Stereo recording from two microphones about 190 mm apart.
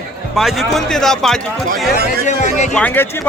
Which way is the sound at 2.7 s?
5° left (ahead or behind).